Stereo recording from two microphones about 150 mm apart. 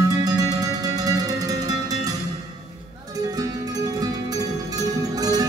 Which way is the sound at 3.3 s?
25° right (ahead or behind).